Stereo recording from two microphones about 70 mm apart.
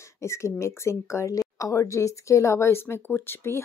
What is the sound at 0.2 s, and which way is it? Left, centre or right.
Speech, left.